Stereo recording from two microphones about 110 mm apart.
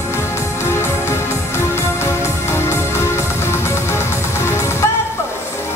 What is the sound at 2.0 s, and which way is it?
Music, 25° left (ahead or behind).